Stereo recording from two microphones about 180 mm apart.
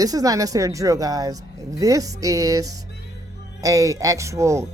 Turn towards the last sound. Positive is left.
turn(degrees=-15)  # may be behind; listen again after turning